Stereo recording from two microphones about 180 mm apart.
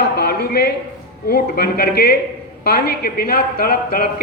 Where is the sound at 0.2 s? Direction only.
60° left (ahead or behind).